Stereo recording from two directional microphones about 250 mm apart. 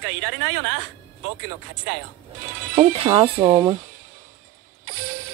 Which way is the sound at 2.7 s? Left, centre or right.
Right.